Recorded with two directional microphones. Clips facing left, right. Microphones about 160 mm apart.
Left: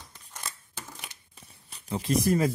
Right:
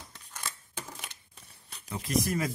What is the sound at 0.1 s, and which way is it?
Scissors, centre (ahead or behind).